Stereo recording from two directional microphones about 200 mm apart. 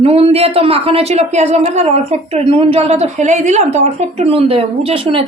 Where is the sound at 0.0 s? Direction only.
30° right (ahead or behind).